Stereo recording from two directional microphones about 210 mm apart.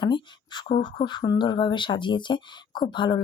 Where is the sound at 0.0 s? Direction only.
20° left (ahead or behind).